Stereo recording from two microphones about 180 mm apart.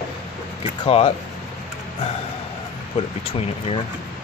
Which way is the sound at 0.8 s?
35° left (ahead or behind).